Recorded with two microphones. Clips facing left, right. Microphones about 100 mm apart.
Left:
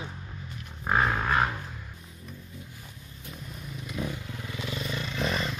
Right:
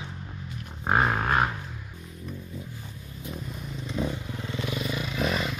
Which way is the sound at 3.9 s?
20° right (ahead or behind).